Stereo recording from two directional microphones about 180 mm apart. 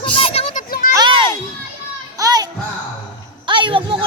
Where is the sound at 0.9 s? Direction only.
25° right (ahead or behind).